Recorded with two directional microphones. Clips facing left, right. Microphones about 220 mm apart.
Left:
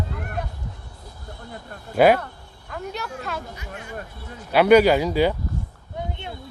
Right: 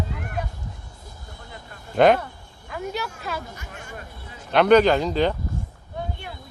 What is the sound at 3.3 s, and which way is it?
Speech, centre (ahead or behind).